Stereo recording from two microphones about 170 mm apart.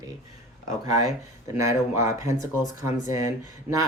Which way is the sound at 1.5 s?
15° right (ahead or behind).